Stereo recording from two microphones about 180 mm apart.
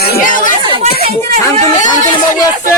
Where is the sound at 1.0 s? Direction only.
35° right (ahead or behind).